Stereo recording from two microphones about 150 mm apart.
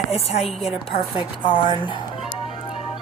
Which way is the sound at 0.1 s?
45° left (ahead or behind).